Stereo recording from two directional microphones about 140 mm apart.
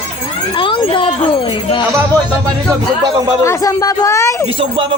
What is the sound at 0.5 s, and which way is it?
A child's voice, 40° left (ahead or behind).